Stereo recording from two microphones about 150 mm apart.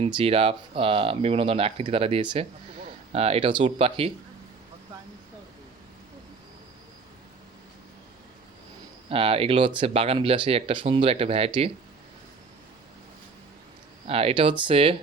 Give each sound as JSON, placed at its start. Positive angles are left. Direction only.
{"t": 0.0, "sound": "speech", "side_deg": -40}
{"t": 9.0, "sound": "speech", "side_deg": -40}
{"t": 14.1, "sound": "speech", "side_deg": -40}